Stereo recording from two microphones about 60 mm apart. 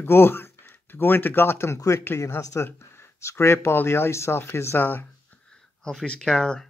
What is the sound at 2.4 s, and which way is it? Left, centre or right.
Speech, left.